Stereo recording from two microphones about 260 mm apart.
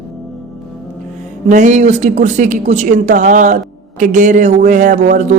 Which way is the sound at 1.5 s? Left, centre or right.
Right.